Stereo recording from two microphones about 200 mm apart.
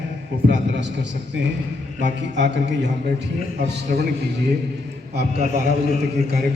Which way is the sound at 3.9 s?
45° right (ahead or behind).